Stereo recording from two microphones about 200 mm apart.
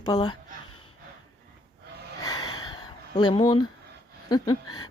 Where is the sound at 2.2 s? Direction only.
20° left (ahead or behind).